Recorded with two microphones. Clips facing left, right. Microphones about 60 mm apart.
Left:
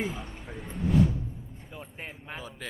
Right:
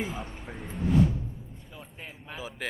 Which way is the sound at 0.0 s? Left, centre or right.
Centre.